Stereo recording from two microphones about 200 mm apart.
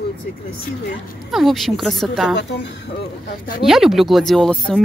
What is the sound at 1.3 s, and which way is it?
Speech, centre (ahead or behind).